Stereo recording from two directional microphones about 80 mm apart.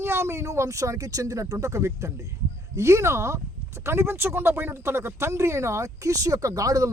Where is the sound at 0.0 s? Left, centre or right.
Right.